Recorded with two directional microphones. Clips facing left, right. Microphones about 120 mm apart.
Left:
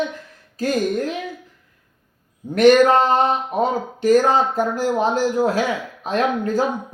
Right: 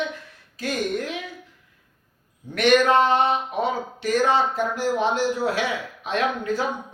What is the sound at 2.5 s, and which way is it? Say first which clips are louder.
Speech: left 5 dB; 40° left (ahead or behind).